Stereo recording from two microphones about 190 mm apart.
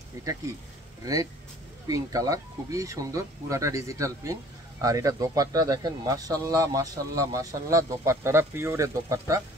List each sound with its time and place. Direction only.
1.0 s speech: 20° right (ahead or behind)